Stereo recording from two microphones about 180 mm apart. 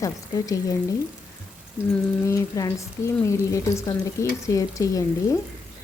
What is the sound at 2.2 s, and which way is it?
Frying, 15° left (ahead or behind).